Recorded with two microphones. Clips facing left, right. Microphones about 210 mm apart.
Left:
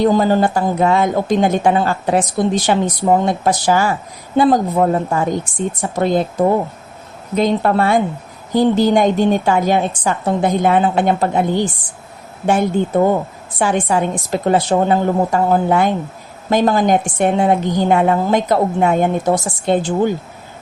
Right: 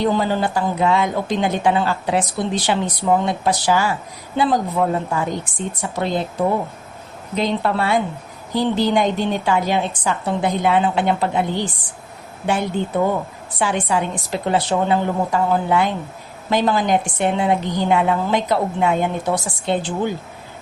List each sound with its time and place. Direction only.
0.0 s speech: 45° left (ahead or behind)